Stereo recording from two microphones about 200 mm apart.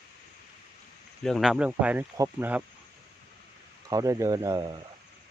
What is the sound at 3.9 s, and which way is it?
Speech, 15° right (ahead or behind).